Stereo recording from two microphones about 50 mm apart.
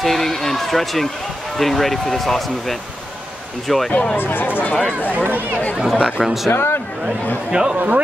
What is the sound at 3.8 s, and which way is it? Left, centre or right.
Speech, left.